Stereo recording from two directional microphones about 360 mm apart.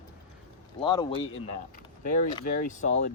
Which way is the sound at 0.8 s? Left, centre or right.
Centre.